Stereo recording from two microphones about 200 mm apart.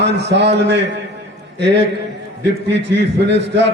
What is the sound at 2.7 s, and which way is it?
A man's voice, 60° right (ahead or behind).